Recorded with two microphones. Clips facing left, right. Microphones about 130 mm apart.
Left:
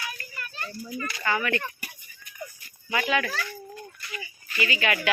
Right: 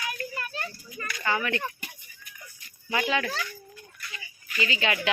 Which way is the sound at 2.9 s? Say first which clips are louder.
Left 1 dB; 25° right (ahead or behind).